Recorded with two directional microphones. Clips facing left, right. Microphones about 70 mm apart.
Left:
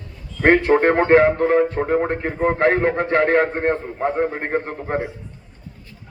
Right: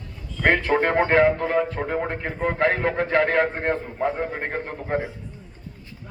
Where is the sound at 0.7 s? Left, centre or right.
Left.